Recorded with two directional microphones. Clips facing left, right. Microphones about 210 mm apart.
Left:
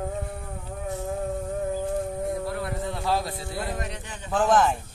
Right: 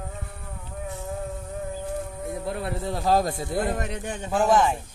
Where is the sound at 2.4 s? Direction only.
20° right (ahead or behind).